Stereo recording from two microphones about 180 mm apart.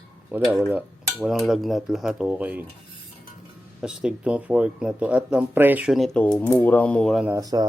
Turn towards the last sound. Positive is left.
turn(degrees=-20)  # may be behind; listen again after turning